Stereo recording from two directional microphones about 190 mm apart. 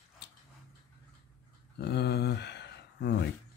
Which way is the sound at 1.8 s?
60° left (ahead or behind).